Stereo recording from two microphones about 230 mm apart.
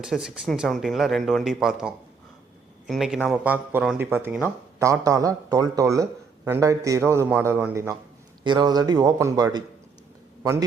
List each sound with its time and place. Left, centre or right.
0.0 s a man's voice: centre